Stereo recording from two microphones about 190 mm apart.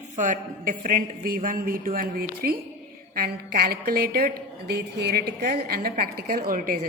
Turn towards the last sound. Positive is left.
turn(degrees=-50)  # may be behind; listen again after turning